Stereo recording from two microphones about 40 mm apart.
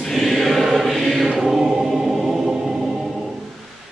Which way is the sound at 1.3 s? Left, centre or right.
Centre.